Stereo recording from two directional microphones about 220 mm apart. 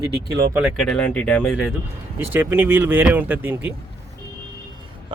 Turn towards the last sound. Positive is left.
turn(degrees=-10)  # may be behind; listen again after turning